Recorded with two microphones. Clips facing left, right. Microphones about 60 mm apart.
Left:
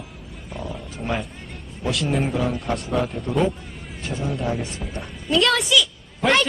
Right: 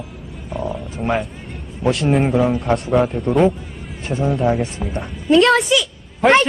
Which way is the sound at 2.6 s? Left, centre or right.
Right.